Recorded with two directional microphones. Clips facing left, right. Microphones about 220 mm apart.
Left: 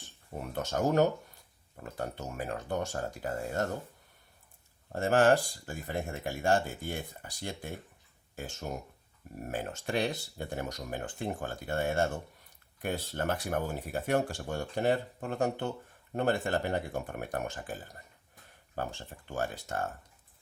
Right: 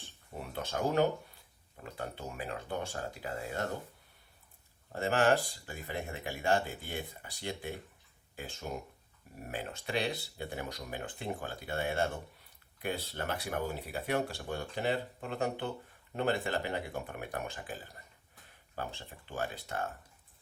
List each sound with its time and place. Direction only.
0.3 s speech: 45° left (ahead or behind)
4.9 s speech: 45° left (ahead or behind)
18.8 s speech: 45° left (ahead or behind)